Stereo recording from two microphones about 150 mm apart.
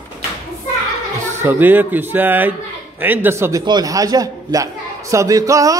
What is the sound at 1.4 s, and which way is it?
A man's voice, 15° right (ahead or behind).